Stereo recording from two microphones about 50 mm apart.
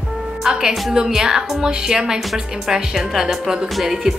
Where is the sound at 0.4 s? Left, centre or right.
Centre.